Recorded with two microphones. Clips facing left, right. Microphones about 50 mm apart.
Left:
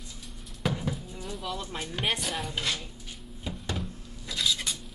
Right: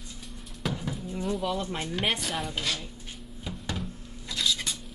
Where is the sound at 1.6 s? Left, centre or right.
Right.